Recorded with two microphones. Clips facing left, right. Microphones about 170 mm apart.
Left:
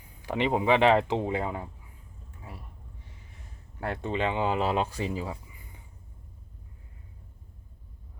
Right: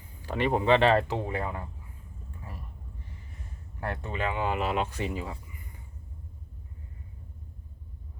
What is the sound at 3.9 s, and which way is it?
Speech, 25° left (ahead or behind).